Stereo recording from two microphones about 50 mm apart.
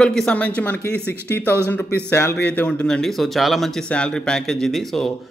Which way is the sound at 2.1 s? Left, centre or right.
Left.